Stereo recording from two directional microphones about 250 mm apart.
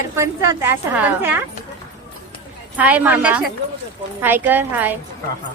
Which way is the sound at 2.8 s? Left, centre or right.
Centre.